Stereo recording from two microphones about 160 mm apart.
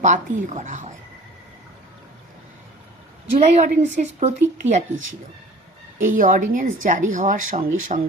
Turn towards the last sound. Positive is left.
turn(degrees=-55)  # may be behind; listen again after turning